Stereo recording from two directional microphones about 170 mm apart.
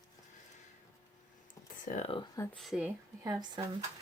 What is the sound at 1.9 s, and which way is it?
Speech, 45° left (ahead or behind).